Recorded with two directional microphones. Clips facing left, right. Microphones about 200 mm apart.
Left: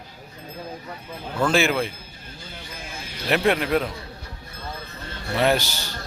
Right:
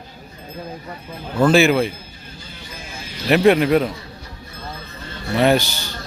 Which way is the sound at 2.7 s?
55° left (ahead or behind).